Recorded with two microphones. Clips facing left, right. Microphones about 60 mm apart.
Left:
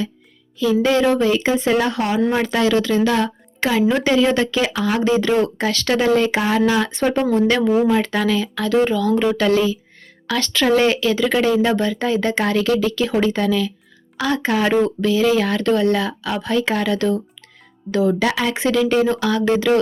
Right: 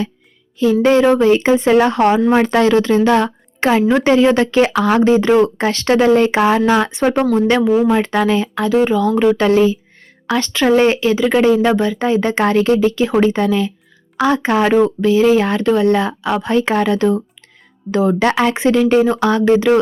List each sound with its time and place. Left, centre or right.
0.6 s speech: right
1.8 s speech: right
6.9 s speech: right
8.7 s speech: centre
9.0 s speech: right
14.7 s speech: centre
15.1 s speech: right
18.1 s speech: right
18.5 s speech: right